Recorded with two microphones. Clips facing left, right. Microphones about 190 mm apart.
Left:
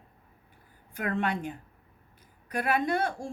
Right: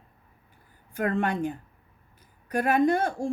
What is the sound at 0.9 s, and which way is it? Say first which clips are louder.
Speech: right 4 dB; 45° right (ahead or behind).